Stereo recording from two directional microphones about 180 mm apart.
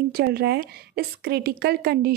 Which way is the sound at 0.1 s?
60° right (ahead or behind).